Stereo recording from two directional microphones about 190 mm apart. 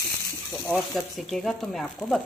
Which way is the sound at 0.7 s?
Centre (ahead or behind).